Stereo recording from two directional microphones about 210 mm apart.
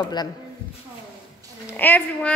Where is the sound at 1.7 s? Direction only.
10° left (ahead or behind).